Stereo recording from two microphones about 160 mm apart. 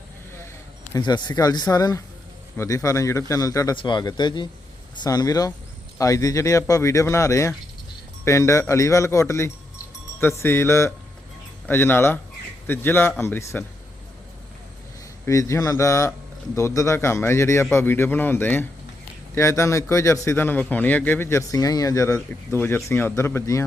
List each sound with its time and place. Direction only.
0.9 s speech: 25° left (ahead or behind)
15.3 s speech: 20° left (ahead or behind)